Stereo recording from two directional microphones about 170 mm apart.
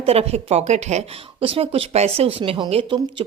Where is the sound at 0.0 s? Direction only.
35° right (ahead or behind).